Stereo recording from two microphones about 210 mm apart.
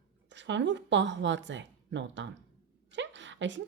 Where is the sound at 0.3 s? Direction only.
60° right (ahead or behind).